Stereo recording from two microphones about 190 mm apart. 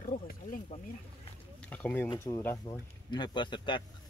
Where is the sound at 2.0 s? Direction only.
15° left (ahead or behind).